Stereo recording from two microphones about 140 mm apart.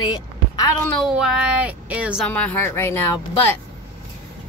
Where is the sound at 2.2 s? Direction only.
10° left (ahead or behind).